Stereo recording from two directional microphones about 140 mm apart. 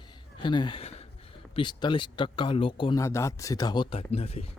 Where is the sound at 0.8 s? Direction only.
45° left (ahead or behind).